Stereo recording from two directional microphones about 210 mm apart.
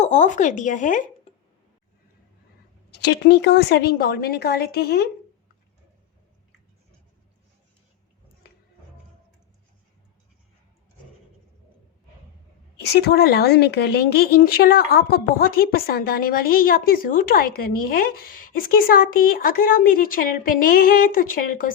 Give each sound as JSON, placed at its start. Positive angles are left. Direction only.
{"t": 0.0, "sound": "speech", "side_deg": 35}
{"t": 2.9, "sound": "speech", "side_deg": 50}
{"t": 12.8, "sound": "speech", "side_deg": 50}